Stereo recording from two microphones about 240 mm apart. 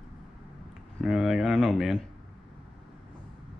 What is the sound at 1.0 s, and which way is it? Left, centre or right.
Speech, centre.